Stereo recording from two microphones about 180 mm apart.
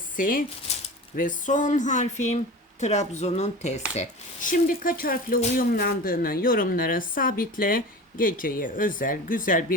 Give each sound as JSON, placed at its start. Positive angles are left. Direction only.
{"t": 0.2, "sound": "speech", "side_deg": 50}
{"t": 0.7, "sound": "a sound", "side_deg": 35}
{"t": 1.1, "sound": "speech", "side_deg": 50}